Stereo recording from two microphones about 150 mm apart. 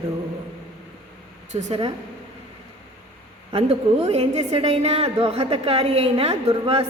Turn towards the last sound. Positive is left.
turn(degrees=-40)  # may be behind; listen again after turning